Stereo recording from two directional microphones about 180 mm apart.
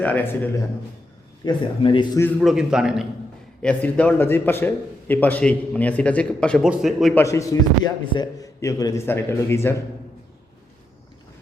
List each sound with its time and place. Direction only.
0.0 s a man's voice: 10° left (ahead or behind)
1.5 s speech: 25° left (ahead or behind)
2.4 s a man's voice: centre (ahead or behind)
3.6 s a man's voice: 5° left (ahead or behind)
7.2 s a man's voice: 15° left (ahead or behind)